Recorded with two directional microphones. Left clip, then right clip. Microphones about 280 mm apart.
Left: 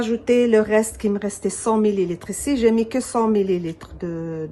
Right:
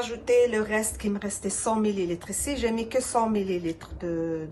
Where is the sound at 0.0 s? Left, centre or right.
Left.